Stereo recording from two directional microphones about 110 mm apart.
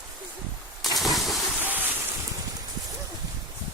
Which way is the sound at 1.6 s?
15° right (ahead or behind).